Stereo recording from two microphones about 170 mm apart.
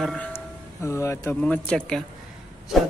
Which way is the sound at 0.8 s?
15° left (ahead or behind).